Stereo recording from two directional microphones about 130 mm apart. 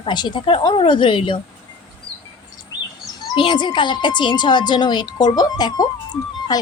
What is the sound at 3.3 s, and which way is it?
Speech, 40° left (ahead or behind).